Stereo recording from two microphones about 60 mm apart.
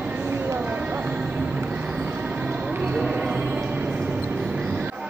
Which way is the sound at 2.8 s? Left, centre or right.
Centre.